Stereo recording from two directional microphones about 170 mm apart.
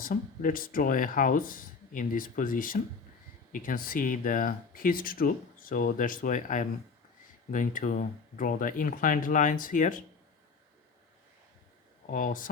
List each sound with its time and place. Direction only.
0.0 s speech: 55° left (ahead or behind)
12.1 s speech: 50° left (ahead or behind)